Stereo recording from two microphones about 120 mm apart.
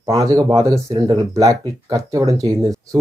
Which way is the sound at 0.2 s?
30° right (ahead or behind).